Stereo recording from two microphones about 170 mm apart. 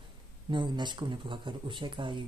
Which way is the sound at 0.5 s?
25° right (ahead or behind).